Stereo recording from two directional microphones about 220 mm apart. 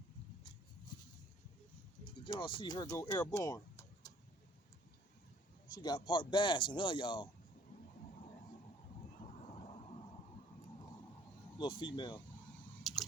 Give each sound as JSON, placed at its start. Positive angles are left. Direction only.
{"t": 2.2, "sound": "speech", "side_deg": 20}
{"t": 5.7, "sound": "speech", "side_deg": 20}
{"t": 11.5, "sound": "speech", "side_deg": 20}
{"t": 12.9, "sound": "chewing", "side_deg": 0}